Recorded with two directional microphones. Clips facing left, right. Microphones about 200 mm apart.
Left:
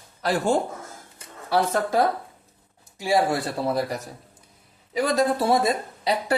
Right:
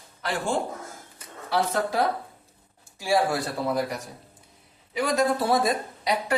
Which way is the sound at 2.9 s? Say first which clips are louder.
Left 2 dB; 20° left (ahead or behind).